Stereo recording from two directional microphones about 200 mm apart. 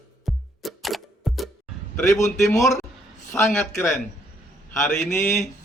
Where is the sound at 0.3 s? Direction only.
Centre (ahead or behind).